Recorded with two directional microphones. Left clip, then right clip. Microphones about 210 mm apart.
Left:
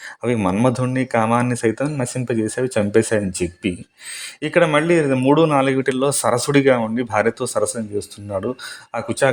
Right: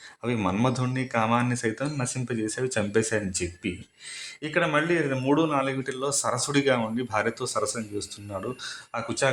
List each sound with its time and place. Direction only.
0.2 s speech: 30° left (ahead or behind)